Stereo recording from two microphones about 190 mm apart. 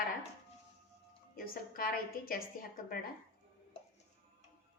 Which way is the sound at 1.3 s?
50° left (ahead or behind).